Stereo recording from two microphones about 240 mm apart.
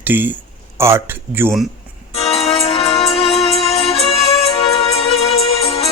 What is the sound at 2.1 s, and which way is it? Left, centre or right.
Music, left.